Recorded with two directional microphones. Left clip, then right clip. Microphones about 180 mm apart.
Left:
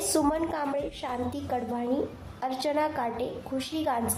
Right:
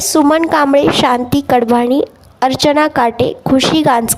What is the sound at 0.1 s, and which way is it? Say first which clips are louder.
A woman's voice: right 17 dB; 60° right (ahead or behind).